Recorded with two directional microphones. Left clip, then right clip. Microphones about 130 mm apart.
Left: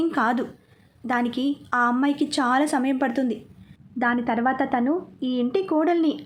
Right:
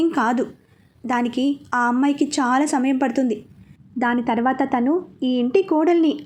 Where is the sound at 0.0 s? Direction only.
15° right (ahead or behind).